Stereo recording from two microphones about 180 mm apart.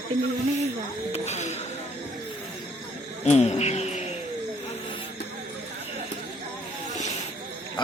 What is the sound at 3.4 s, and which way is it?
Insect, 35° left (ahead or behind).